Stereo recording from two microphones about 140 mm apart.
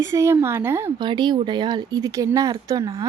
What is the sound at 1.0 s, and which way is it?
Speech, 35° right (ahead or behind).